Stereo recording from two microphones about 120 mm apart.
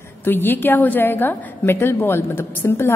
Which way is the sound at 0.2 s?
15° left (ahead or behind).